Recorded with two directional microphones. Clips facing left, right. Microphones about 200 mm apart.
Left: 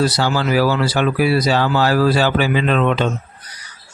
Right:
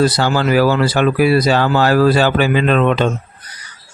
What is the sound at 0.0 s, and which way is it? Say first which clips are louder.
Speech: right 3 dB; 55° right (ahead or behind).